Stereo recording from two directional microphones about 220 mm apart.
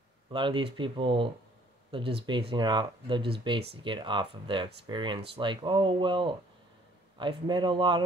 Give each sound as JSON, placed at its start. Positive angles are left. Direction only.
{"t": 0.3, "sound": "speech", "side_deg": -20}